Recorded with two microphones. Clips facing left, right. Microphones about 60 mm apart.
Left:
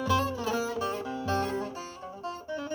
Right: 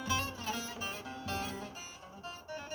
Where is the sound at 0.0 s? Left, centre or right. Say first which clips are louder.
Left 9 dB; left.